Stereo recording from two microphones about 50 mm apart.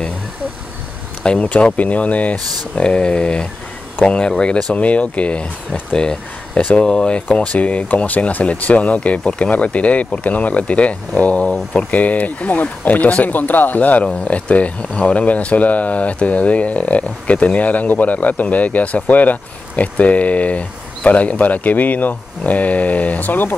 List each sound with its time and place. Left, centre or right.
1.4 s speech: left